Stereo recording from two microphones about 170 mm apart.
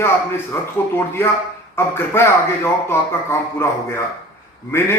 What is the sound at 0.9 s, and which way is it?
Speech, 15° left (ahead or behind).